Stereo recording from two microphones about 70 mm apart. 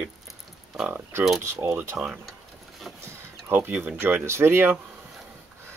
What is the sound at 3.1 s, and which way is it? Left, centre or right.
Speech, right.